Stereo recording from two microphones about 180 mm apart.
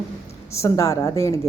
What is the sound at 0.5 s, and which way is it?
Speech, 15° left (ahead or behind).